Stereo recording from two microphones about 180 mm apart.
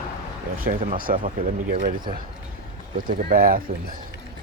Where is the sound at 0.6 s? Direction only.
50° right (ahead or behind).